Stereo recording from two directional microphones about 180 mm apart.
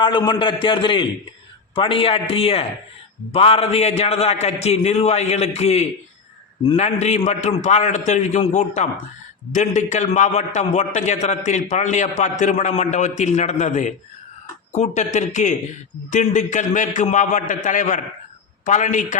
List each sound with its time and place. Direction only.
0.0 s a man's voice: 25° left (ahead or behind); by 19.0 s 45° left (ahead or behind)